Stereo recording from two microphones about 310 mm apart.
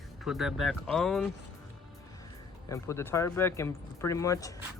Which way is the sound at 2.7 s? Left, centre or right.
Centre.